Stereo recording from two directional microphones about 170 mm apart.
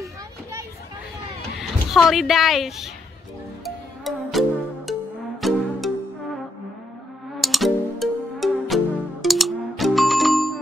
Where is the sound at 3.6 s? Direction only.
Centre (ahead or behind).